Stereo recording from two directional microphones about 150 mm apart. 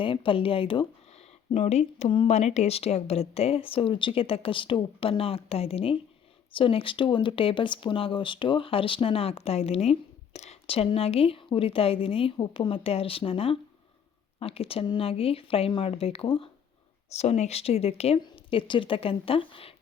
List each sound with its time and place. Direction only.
0.0 s speech: 35° left (ahead or behind)
17.1 s speech: 45° left (ahead or behind)